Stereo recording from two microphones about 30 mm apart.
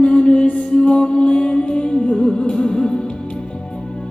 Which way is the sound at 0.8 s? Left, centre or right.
Left.